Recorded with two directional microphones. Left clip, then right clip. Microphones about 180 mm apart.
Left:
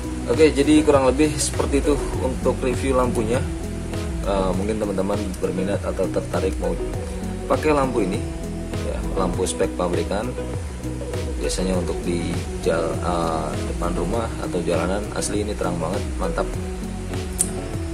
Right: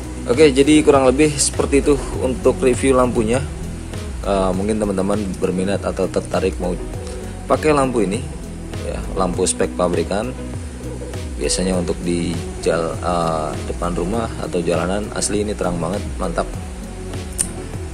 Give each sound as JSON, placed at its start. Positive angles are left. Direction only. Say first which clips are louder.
{"t": 0.4, "sound": "speech", "louder": "right 4 dB", "side_deg": -40}
{"t": 7.6, "sound": "speech", "louder": "right 4 dB", "side_deg": -30}
{"t": 9.2, "sound": "speech", "louder": "right 4 dB", "side_deg": -25}
{"t": 11.4, "sound": "speech", "louder": "right 5 dB", "side_deg": -30}